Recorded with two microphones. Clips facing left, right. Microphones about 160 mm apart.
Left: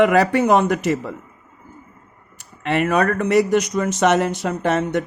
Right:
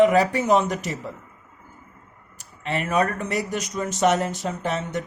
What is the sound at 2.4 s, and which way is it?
Speech, 70° left (ahead or behind).